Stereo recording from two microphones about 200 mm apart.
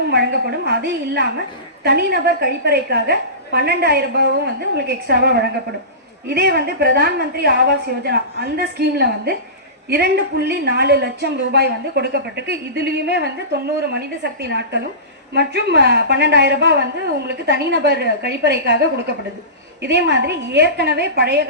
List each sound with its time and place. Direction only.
0.1 s a woman's voice: 55° right (ahead or behind)
19.8 s a woman's voice: 55° right (ahead or behind)